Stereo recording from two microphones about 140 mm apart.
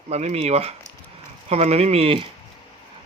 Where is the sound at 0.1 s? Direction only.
50° right (ahead or behind).